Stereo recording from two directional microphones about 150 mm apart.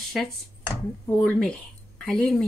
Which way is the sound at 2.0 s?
Centre (ahead or behind).